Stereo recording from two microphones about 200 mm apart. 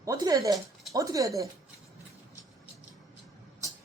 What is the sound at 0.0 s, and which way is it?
A woman's voice, 15° right (ahead or behind).